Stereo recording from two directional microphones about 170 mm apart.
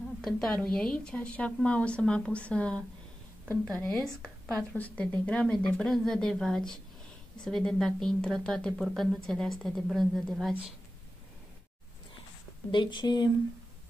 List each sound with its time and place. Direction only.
0.2 s a woman's voice: 5° left (ahead or behind)
12.7 s speech: 25° left (ahead or behind)